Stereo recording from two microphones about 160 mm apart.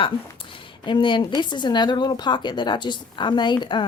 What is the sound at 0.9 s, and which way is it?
A woman's voice, 30° left (ahead or behind).